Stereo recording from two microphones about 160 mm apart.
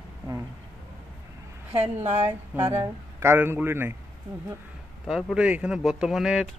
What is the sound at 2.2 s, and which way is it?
Speech, 15° right (ahead or behind).